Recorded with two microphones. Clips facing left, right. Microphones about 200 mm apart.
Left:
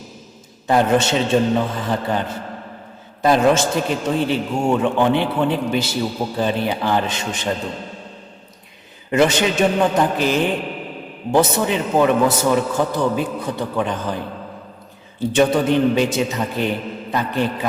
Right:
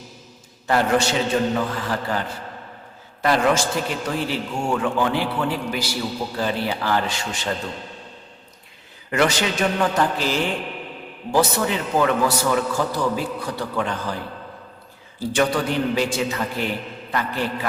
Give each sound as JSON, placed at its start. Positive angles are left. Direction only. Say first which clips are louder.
{"t": 0.7, "sound": "a man's voice", "louder": "left 3 dB", "side_deg": 20}
{"t": 9.0, "sound": "a man's voice", "louder": "left 4 dB", "side_deg": 20}
{"t": 15.2, "sound": "a man's voice", "louder": "left 5 dB", "side_deg": 20}